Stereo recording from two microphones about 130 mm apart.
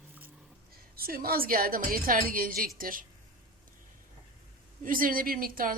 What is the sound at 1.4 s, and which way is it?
Speech, 90° right.